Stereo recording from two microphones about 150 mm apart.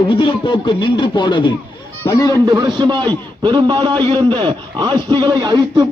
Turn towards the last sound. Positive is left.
turn(degrees=-30)  # may be behind; listen again after turning